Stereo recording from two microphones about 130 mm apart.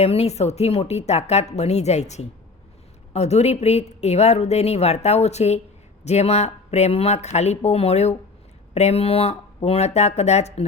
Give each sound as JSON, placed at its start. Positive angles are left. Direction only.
{"t": 0.0, "sound": "a woman's voice", "side_deg": 55}